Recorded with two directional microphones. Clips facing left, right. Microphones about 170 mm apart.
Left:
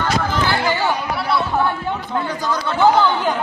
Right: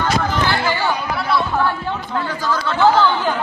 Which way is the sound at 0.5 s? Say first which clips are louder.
Even; 15° left (ahead or behind).